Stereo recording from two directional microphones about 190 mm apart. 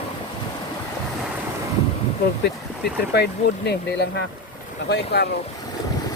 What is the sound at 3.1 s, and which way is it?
Speech, 60° left (ahead or behind).